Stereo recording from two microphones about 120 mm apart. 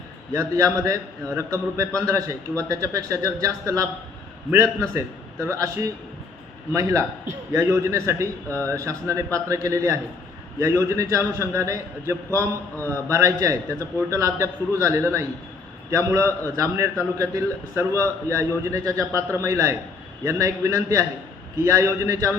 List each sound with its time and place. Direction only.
0.3 s a man's voice: 25° right (ahead or behind)
4.9 s a man's voice: 25° right (ahead or behind)
6.7 s a man's voice: 25° right (ahead or behind)
8.4 s speech: 15° left (ahead or behind)
8.7 s a man's voice: 25° right (ahead or behind)